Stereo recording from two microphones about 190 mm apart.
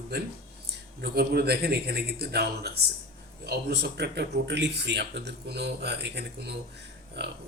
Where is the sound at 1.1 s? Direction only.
55° right (ahead or behind).